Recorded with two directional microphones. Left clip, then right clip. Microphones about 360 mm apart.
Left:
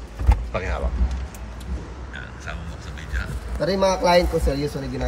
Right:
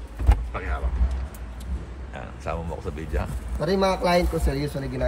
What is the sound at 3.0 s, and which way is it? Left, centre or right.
Speech, centre.